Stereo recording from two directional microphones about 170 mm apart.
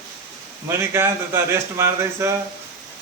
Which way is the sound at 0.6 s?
15° right (ahead or behind).